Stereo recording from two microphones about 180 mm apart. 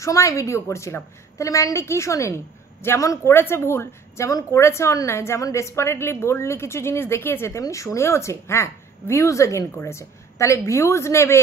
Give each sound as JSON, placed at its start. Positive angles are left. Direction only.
{"t": 0.0, "sound": "a woman's voice", "side_deg": 15}